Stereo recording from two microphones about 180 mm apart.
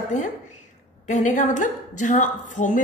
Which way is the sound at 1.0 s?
40° left (ahead or behind).